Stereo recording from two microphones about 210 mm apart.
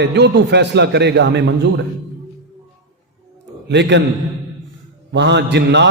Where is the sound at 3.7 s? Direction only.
55° right (ahead or behind).